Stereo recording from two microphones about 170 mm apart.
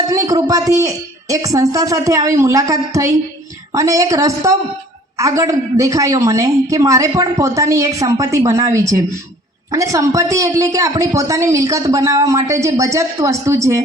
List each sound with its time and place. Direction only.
0.3 s a woman's voice: 20° right (ahead or behind)